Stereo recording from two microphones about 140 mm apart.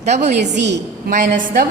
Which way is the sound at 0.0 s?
55° right (ahead or behind).